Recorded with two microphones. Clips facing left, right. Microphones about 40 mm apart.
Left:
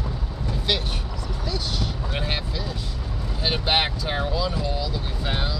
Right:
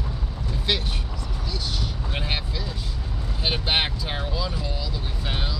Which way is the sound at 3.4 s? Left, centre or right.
Right.